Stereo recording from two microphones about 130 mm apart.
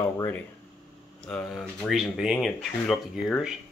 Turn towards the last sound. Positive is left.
turn(degrees=0)  # may be behind; listen again after turning